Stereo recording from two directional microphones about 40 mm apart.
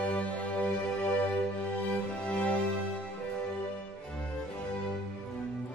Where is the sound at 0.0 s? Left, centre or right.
Left.